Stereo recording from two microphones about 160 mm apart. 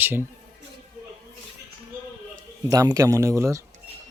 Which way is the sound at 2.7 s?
20° right (ahead or behind).